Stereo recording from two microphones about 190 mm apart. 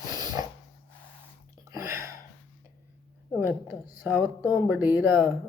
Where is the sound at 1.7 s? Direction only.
15° right (ahead or behind).